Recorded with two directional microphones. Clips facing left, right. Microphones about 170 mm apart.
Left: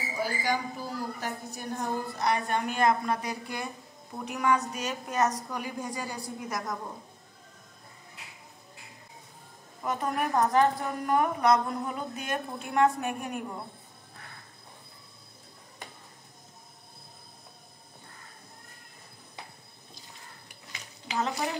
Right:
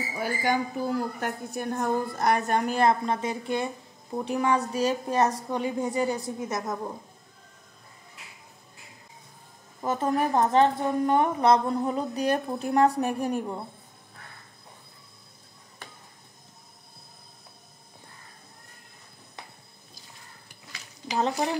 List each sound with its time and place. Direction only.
0.2 s a woman's voice: 55° right (ahead or behind); by 6.8 s 25° right (ahead or behind)
9.8 s a woman's voice: 30° right (ahead or behind)